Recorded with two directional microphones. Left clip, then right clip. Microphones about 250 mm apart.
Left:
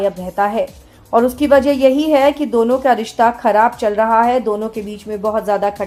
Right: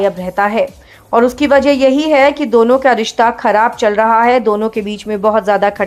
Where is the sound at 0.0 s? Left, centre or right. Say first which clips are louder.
Right 3 dB; centre.